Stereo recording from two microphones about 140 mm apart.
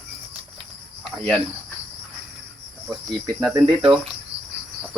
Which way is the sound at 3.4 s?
35° right (ahead or behind).